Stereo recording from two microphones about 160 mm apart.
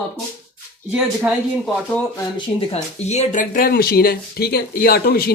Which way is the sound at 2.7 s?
45° left (ahead or behind).